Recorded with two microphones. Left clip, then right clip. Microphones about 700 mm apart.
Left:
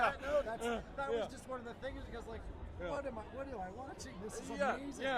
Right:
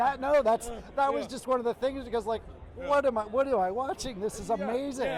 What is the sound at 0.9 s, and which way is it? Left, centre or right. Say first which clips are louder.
Speech: right 11 dB; right.